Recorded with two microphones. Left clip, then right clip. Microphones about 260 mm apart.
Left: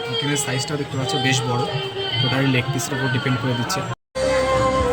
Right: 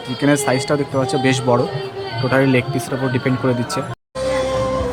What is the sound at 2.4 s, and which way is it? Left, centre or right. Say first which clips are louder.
Speech: right 5 dB; centre.